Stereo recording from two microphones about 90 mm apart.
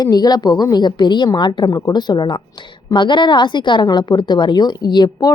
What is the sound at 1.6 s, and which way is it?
A woman's voice, 40° left (ahead or behind).